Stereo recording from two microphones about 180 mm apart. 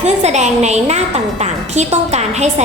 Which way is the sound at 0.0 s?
40° right (ahead or behind).